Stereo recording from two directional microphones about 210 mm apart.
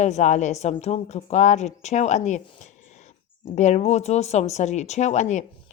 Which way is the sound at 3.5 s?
35° left (ahead or behind).